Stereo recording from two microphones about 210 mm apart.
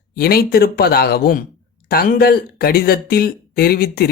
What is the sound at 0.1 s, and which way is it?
Speech, 45° left (ahead or behind).